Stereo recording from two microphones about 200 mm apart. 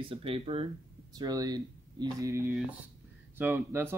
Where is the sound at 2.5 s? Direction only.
Centre (ahead or behind).